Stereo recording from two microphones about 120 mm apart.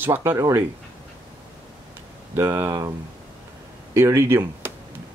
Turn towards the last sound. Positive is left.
turn(degrees=-20)  # may be behind; listen again after turning